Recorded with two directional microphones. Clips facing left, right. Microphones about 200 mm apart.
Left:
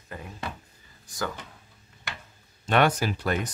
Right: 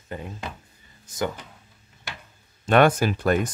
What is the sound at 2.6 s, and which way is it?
Speech, 50° right (ahead or behind).